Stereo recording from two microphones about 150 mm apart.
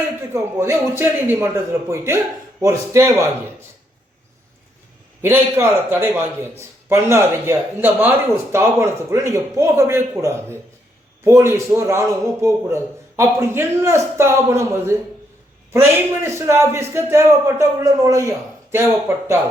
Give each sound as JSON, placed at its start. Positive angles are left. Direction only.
{"t": 0.3, "sound": "a man's voice", "side_deg": -15}
{"t": 5.2, "sound": "a man's voice", "side_deg": -15}